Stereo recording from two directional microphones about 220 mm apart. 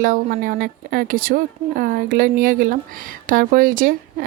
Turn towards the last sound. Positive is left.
turn(degrees=-40)  # may be behind; listen again after turning